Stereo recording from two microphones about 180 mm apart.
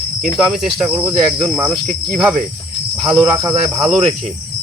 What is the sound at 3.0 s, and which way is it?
Cricket, 5° right (ahead or behind).